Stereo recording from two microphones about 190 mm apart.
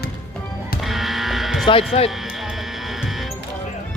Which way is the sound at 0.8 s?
Centre (ahead or behind).